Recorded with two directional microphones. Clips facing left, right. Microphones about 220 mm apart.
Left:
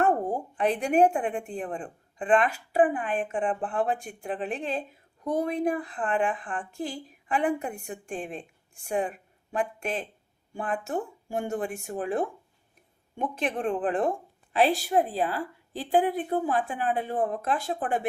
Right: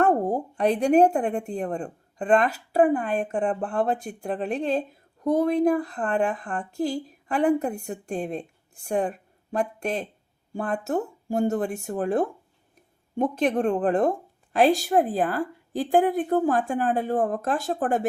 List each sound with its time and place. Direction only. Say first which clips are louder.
0.0 s a woman's voice: right 4 dB; 40° right (ahead or behind)